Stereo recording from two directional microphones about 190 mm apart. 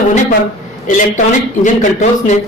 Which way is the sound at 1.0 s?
40° left (ahead or behind).